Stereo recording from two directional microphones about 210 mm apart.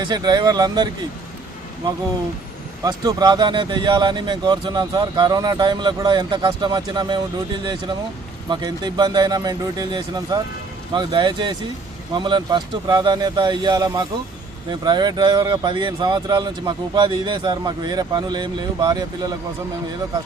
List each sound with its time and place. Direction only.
0.0 s speech: 20° right (ahead or behind)
2.8 s speech: 20° right (ahead or behind)